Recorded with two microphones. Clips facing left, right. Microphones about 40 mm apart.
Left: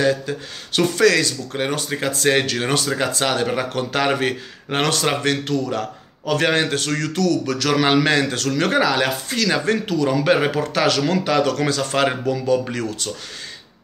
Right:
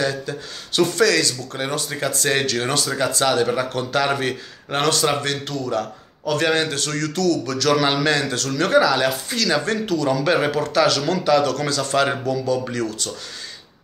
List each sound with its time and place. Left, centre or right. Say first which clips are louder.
0.0 s a man's voice: left 4 dB; left